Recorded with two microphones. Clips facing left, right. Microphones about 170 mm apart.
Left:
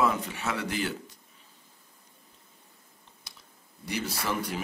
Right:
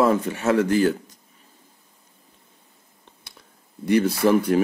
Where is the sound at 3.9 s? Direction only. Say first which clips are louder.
Right 14 dB; 55° right (ahead or behind).